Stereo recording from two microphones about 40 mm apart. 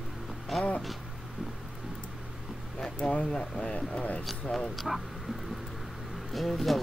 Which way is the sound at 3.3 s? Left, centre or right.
Centre.